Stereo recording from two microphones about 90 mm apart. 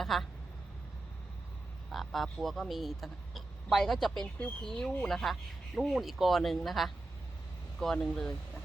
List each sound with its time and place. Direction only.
0.0 s speech: centre (ahead or behind)
1.9 s speech: centre (ahead or behind)